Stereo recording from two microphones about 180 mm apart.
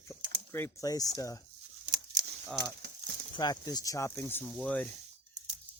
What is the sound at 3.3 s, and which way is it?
Speech, 20° left (ahead or behind).